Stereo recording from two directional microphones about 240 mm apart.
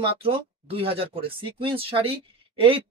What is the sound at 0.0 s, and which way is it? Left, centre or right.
Speech, right.